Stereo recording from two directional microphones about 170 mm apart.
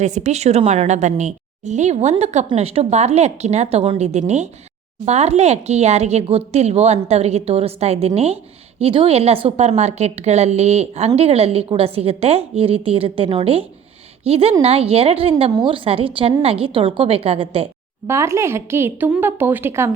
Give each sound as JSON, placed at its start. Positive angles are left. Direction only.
{"t": 0.0, "sound": "a woman's voice", "side_deg": -45}
{"t": 18.1, "sound": "a woman's voice", "side_deg": -15}